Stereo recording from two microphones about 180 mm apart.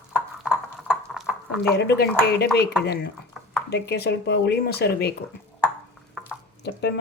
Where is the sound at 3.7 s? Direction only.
65° left (ahead or behind).